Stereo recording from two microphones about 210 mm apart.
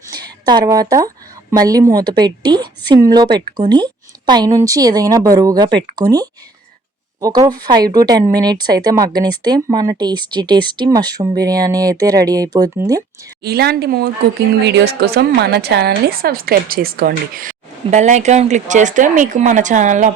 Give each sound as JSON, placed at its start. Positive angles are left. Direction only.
{"t": 0.1, "sound": "a woman's voice", "side_deg": -20}
{"t": 13.4, "sound": "a woman's voice", "side_deg": -50}